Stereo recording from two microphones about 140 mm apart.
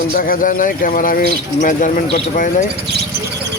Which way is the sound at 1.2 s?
65° left (ahead or behind).